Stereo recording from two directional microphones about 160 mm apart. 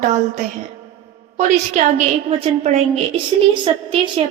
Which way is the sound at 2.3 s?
35° right (ahead or behind).